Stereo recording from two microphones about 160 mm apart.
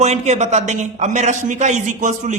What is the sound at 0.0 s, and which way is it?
A man's voice, 45° right (ahead or behind).